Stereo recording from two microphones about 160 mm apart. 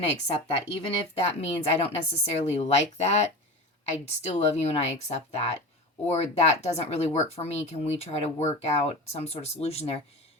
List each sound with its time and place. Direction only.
0.3 s a woman's voice: 40° left (ahead or behind)